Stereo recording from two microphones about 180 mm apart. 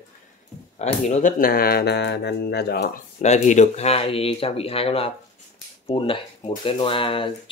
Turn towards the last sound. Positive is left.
turn(degrees=30)  # may be behind; listen again after turning